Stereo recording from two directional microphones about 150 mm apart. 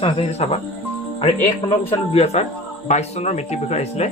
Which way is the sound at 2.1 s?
45° left (ahead or behind).